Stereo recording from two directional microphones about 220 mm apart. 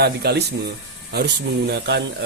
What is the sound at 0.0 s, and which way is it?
Speech, 45° right (ahead or behind).